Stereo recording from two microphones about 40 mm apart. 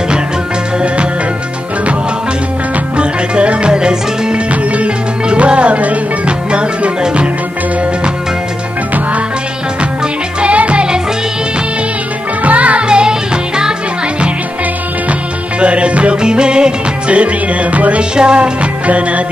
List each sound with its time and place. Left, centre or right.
3.0 s music: right
10.4 s music: right
12.4 s music: right
12.8 s music: right
15.6 s music: right
17.1 s music: right
18.1 s music: right